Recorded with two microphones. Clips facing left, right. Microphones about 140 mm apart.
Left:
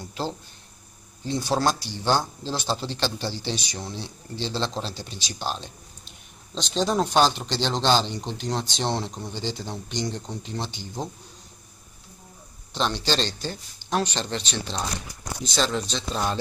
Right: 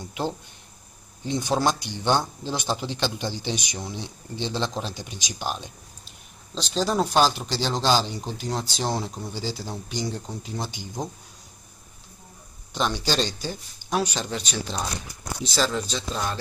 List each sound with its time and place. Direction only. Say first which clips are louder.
0.1 s speech: right 2 dB; 15° right (ahead or behind)
6.0 s speech: even; centre (ahead or behind)
12.7 s speech: even; 10° right (ahead or behind)